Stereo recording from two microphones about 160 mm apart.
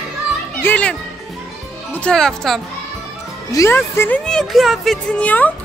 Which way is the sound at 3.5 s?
15° left (ahead or behind).